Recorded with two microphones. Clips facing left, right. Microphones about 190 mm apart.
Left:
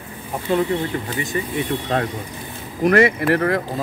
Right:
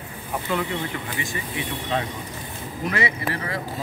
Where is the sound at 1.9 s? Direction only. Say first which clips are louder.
Left 4 dB; 55° left (ahead or behind).